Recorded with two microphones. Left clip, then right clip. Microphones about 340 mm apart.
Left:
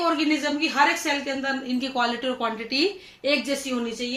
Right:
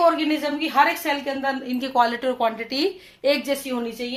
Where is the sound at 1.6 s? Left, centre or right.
Centre.